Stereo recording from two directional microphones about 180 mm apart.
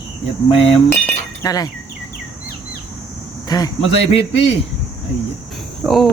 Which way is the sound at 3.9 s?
35° left (ahead or behind).